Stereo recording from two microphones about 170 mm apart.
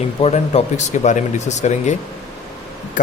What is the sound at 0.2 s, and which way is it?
Speech, 40° left (ahead or behind).